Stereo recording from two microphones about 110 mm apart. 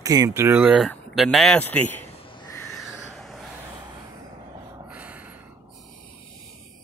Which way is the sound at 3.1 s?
5° left (ahead or behind).